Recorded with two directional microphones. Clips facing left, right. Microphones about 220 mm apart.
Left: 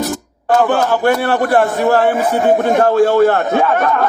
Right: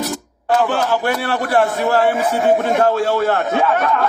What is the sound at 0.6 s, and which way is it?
A man's voice, 50° left (ahead or behind).